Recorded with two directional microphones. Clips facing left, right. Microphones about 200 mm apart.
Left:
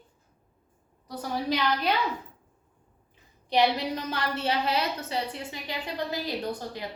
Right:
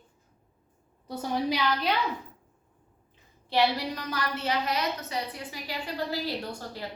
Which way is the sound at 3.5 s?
20° left (ahead or behind).